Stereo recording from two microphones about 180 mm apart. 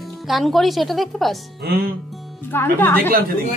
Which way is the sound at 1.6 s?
60° right (ahead or behind).